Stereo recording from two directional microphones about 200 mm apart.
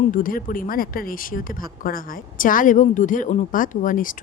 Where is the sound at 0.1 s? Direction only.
45° left (ahead or behind).